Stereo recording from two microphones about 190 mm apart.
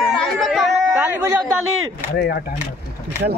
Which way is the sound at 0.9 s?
10° right (ahead or behind).